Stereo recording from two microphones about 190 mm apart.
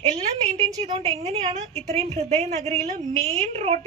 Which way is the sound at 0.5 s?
35° right (ahead or behind).